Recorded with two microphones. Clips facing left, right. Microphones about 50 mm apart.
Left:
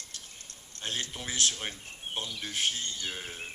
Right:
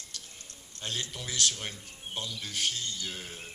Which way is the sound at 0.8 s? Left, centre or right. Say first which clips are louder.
Left 1 dB; left.